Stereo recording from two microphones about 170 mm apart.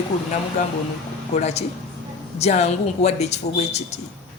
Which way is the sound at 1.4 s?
40° left (ahead or behind).